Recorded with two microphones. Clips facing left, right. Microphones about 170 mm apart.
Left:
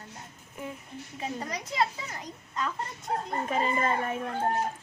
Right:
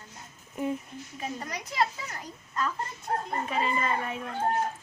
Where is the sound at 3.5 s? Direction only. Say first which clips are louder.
Left 2 dB; 45° left (ahead or behind).